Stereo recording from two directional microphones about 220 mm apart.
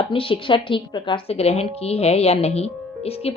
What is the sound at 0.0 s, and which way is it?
A woman's voice, 25° left (ahead or behind).